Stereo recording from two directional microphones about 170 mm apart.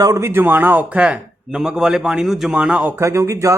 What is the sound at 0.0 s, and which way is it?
A man's voice, 15° right (ahead or behind).